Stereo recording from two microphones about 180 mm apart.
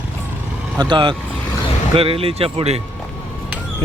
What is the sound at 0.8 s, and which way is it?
Speech, 25° right (ahead or behind).